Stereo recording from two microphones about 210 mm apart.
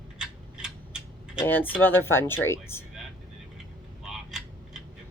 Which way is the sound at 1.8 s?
10° left (ahead or behind).